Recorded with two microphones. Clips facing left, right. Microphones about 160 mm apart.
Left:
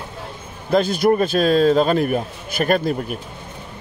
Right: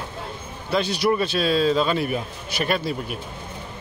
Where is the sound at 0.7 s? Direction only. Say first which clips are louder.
Left 5 dB; 50° left (ahead or behind).